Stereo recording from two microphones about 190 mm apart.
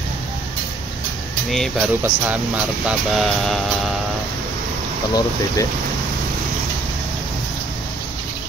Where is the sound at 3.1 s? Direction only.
Centre (ahead or behind).